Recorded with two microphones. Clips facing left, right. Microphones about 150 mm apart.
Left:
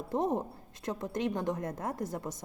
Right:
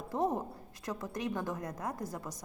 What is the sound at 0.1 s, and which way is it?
A woman's voice, 20° left (ahead or behind).